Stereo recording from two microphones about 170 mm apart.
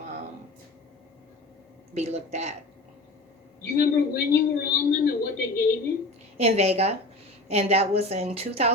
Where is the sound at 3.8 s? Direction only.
65° left (ahead or behind).